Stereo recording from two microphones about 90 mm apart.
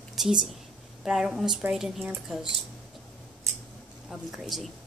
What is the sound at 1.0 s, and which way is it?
Speech, 5° right (ahead or behind).